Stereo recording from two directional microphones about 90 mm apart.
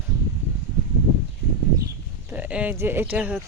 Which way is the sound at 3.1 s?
15° right (ahead or behind).